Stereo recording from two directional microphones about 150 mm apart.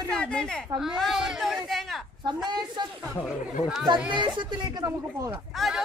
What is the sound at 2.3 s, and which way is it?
Speech, 30° right (ahead or behind).